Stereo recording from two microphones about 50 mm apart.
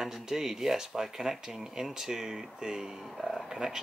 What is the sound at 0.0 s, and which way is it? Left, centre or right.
Speech, centre.